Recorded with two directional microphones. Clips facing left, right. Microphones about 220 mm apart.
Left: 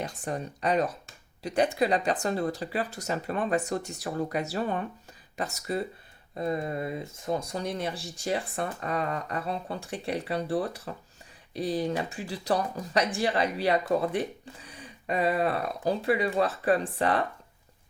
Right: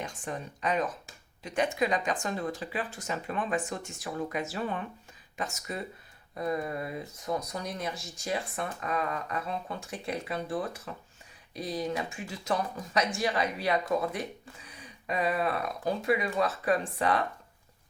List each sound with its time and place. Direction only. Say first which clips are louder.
0.0 s speech: left 4 dB; 40° left (ahead or behind)